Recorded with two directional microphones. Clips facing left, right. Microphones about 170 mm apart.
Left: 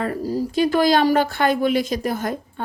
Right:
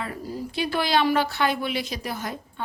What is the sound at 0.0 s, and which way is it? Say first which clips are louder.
Speech: left 9 dB; 40° left (ahead or behind).